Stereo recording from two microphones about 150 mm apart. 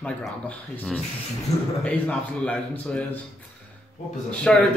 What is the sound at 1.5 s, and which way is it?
Speech, 45° left (ahead or behind).